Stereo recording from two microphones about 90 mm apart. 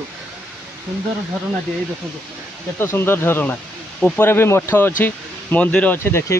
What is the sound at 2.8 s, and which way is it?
Speech, 25° left (ahead or behind).